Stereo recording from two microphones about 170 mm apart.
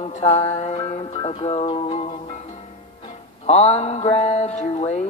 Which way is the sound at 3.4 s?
40° left (ahead or behind).